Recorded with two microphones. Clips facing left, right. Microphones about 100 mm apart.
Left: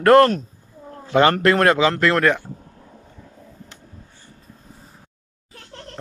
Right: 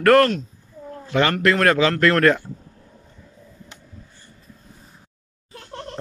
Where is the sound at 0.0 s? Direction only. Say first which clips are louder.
Left 2 dB; 25° left (ahead or behind).